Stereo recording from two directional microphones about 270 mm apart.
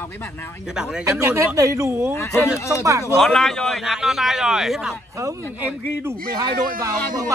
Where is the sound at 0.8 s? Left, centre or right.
Centre.